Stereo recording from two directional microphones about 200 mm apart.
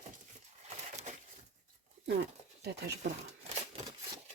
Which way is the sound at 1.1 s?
35° right (ahead or behind).